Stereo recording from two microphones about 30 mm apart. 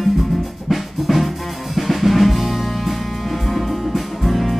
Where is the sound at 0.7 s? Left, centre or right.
Centre.